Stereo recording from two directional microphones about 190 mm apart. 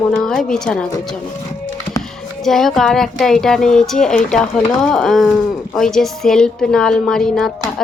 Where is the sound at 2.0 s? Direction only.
Centre (ahead or behind).